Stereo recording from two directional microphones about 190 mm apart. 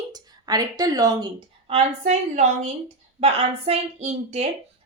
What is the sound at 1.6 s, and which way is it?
A woman's voice, 35° right (ahead or behind).